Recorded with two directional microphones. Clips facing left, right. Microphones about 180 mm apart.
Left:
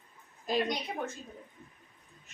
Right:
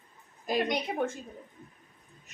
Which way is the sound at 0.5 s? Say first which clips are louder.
Right 3 dB; 55° right (ahead or behind).